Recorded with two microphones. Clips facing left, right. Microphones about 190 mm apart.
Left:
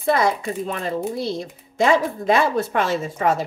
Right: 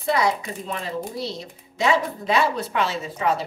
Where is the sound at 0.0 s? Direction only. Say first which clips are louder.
Left 3 dB; 50° left (ahead or behind).